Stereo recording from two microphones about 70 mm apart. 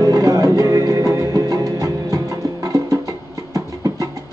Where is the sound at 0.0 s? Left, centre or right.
Right.